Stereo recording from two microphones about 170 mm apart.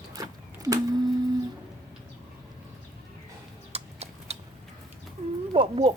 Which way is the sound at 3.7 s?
35° right (ahead or behind).